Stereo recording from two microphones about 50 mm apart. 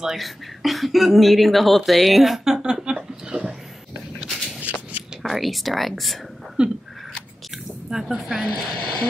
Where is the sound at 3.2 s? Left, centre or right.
Right.